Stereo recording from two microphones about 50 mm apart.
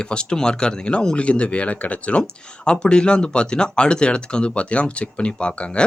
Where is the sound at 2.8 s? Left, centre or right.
Centre.